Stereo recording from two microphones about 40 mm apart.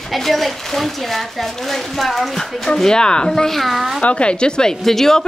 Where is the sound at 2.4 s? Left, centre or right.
Centre.